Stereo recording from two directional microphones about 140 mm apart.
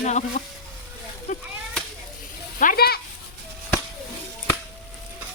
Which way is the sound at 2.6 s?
90° left.